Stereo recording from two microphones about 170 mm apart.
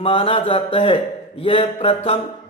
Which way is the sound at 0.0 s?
30° left (ahead or behind).